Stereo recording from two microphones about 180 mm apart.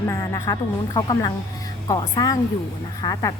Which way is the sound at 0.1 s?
15° left (ahead or behind).